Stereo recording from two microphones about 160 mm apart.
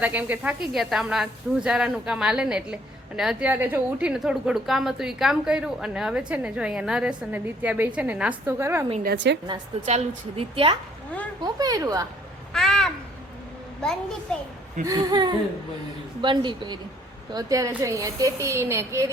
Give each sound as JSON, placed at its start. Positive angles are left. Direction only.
{"t": 0.0, "sound": "a woman's voice", "side_deg": -10}
{"t": 9.0, "sound": "a woman's voice", "side_deg": -90}
{"t": 9.8, "sound": "a woman's voice", "side_deg": -40}
{"t": 11.4, "sound": "a woman's voice", "side_deg": -25}
{"t": 12.5, "sound": "babbling", "side_deg": 5}
{"t": 13.8, "sound": "a woman's voice", "side_deg": 5}
{"t": 14.8, "sound": "a woman's voice", "side_deg": -25}